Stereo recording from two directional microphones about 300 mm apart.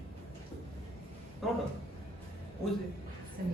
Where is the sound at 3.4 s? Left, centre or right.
Right.